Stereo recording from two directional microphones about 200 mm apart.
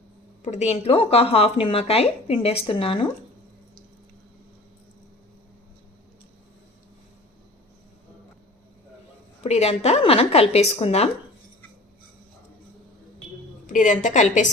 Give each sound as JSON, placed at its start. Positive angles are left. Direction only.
{"t": 0.4, "sound": "a woman's voice", "side_deg": 35}
{"t": 9.4, "sound": "a woman's voice", "side_deg": 30}
{"t": 13.7, "sound": "a woman's voice", "side_deg": 40}